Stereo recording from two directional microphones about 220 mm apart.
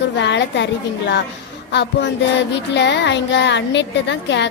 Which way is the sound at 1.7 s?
50° left (ahead or behind).